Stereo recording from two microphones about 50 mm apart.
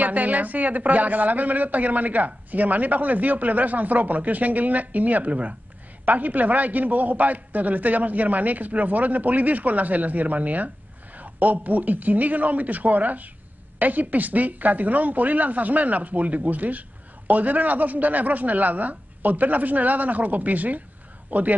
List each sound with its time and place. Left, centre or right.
0.0 s a man's voice: right